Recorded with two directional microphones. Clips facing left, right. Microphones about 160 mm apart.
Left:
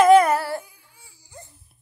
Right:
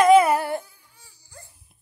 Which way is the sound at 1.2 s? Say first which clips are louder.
Left 4 dB; 20° left (ahead or behind).